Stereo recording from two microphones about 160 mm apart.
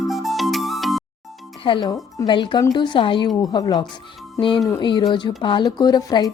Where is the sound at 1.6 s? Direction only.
30° left (ahead or behind).